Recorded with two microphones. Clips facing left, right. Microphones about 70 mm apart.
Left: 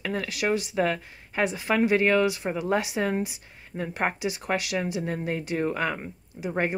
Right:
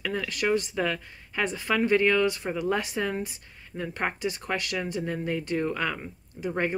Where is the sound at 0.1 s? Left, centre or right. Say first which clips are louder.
Even; centre.